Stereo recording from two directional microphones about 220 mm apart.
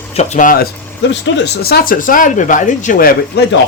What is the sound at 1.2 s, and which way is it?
Speech, 50° left (ahead or behind).